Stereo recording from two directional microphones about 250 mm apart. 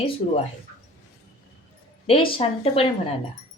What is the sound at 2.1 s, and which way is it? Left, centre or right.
Speech, left.